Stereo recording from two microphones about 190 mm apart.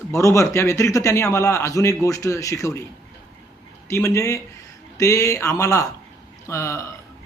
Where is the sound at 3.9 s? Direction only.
15° left (ahead or behind).